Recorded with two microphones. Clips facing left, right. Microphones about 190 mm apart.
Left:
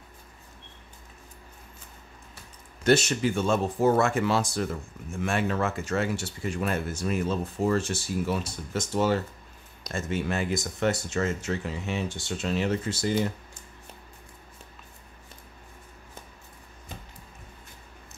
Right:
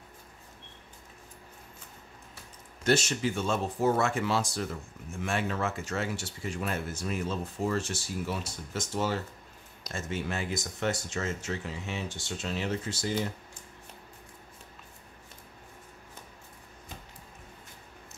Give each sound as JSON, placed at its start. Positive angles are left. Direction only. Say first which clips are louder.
{"t": 2.8, "sound": "speech", "louder": "left 4 dB", "side_deg": 60}